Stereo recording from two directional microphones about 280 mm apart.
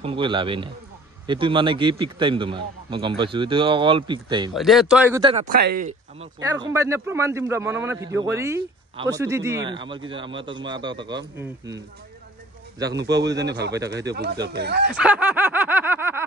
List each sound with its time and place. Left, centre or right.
0.0 s a man's voice: centre
4.6 s speech: centre
5.5 s speech: right
6.4 s a man's voice: centre
12.9 s speech: right
13.7 s a man's voice: centre
14.1 s speech: right
15.0 s snicker: centre